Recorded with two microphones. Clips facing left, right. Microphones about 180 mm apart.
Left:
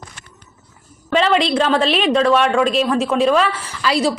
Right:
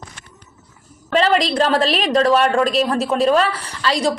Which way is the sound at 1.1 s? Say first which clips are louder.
Even; centre (ahead or behind).